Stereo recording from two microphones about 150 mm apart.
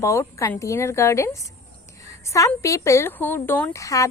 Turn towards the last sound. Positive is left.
turn(degrees=20)  # may be behind; listen again after turning